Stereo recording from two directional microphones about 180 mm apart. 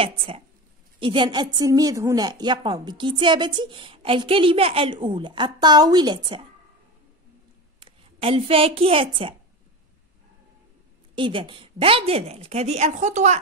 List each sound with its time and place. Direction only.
0.0 s a woman's voice: 30° right (ahead or behind)
7.8 s a woman's voice: 30° right (ahead or behind)
11.1 s a woman's voice: 25° right (ahead or behind)